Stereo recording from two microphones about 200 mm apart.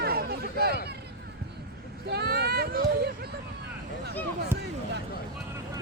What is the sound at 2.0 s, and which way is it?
Speech, 55° right (ahead or behind).